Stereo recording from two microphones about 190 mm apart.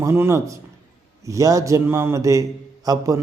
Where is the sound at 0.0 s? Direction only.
15° right (ahead or behind).